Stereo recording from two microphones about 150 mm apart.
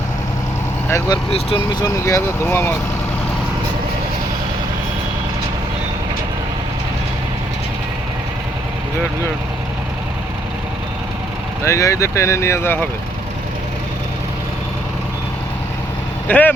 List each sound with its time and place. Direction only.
0.9 s speech: 25° left (ahead or behind)
1.3 s speech: 40° left (ahead or behind)
1.8 s speech: 20° left (ahead or behind)
11.6 s speech: 20° left (ahead or behind)
16.3 s speech: 10° left (ahead or behind)